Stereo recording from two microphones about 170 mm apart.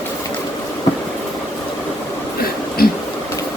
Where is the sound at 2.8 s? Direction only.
60° left (ahead or behind).